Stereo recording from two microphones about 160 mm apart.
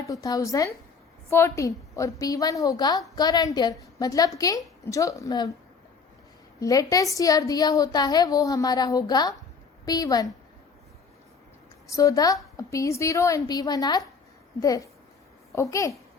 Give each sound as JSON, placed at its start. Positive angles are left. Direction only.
{"t": 0.1, "sound": "a woman's voice", "side_deg": 20}
{"t": 6.6, "sound": "a woman's voice", "side_deg": 20}
{"t": 11.9, "sound": "a woman's voice", "side_deg": 20}